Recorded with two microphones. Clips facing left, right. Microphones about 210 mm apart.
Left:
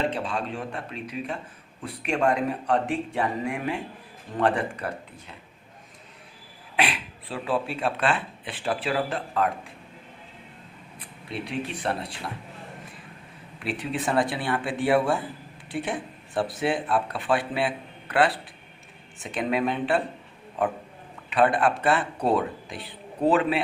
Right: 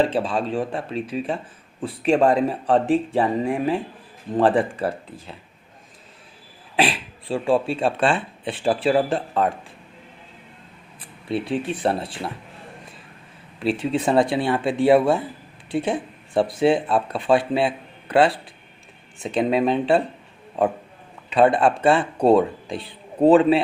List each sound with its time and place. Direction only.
0.1 s speech: 30° right (ahead or behind)
6.7 s speech: 30° right (ahead or behind)
11.3 s speech: 30° right (ahead or behind)
13.6 s speech: 25° right (ahead or behind)
21.2 s speech: 25° right (ahead or behind)